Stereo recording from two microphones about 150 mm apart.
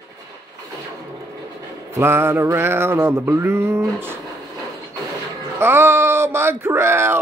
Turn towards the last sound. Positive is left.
turn(degrees=-15)  # may be behind; listen again after turning